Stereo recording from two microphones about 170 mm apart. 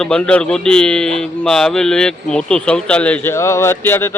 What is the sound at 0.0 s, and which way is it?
Speech, 5° left (ahead or behind).